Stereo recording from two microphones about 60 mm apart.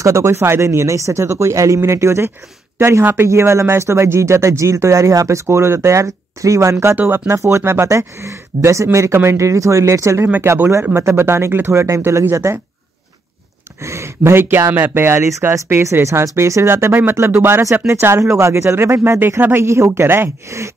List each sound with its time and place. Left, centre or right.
0.0 s speech: right
3.3 s speech: right
13.8 s speech: right
20.4 s speech: right